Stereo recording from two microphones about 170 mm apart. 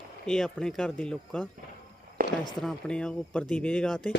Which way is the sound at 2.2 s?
60° right (ahead or behind).